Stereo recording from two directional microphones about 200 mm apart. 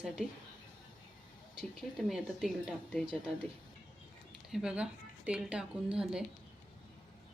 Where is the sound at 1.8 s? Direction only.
Centre (ahead or behind).